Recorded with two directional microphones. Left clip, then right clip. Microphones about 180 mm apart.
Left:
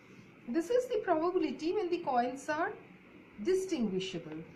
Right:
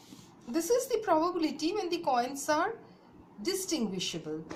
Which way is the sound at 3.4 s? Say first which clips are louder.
Left 1 dB; 5° right (ahead or behind).